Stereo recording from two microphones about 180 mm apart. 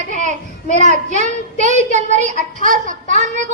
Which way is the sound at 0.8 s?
40° right (ahead or behind).